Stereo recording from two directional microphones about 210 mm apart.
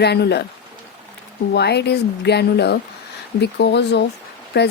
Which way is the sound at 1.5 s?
50° left (ahead or behind).